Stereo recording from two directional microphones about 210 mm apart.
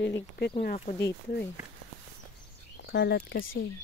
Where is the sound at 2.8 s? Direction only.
55° left (ahead or behind).